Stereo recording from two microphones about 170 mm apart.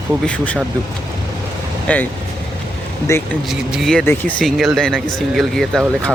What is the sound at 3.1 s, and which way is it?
Speech, 15° left (ahead or behind).